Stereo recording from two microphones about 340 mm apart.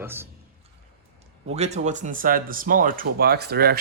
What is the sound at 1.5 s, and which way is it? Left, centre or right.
Speech, centre.